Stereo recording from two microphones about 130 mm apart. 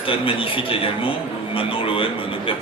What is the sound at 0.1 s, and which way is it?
Speech, 45° left (ahead or behind).